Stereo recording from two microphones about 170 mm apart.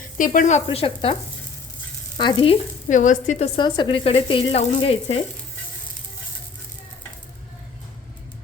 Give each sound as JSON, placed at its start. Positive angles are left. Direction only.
{"t": 0.2, "sound": "a woman's voice", "side_deg": 45}
{"t": 2.1, "sound": "frying", "side_deg": 30}
{"t": 2.9, "sound": "a woman's voice", "side_deg": 50}